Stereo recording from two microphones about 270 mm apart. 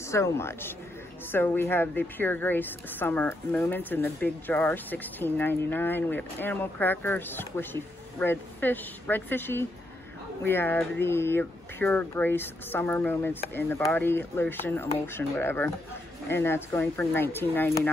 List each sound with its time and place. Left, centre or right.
0.0 s speech: centre